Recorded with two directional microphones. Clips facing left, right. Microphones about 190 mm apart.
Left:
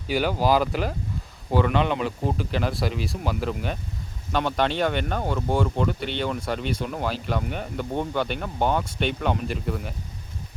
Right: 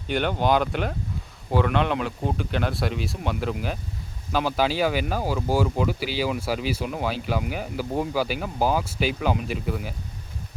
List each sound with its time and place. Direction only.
0.1 s speech: 5° left (ahead or behind)